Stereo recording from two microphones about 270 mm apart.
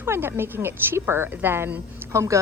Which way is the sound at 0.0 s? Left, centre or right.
Centre.